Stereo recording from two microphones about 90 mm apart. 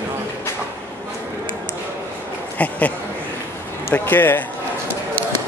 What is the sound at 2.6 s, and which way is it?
Speech, 15° left (ahead or behind).